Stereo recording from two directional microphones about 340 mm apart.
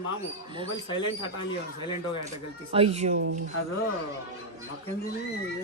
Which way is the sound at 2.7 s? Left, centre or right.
Centre.